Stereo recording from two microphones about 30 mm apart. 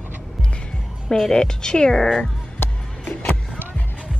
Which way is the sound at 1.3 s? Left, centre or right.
Left.